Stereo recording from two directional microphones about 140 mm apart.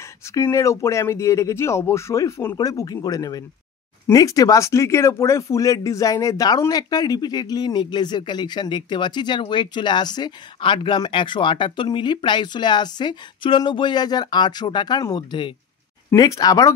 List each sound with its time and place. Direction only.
0.3 s speech: 20° left (ahead or behind)